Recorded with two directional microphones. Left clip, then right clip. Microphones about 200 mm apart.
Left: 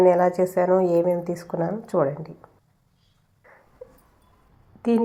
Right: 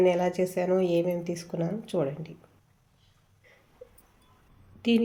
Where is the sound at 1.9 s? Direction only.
Centre (ahead or behind).